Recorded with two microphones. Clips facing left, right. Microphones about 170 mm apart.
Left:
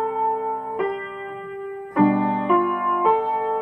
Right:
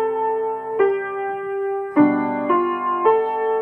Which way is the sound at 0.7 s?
70° right (ahead or behind).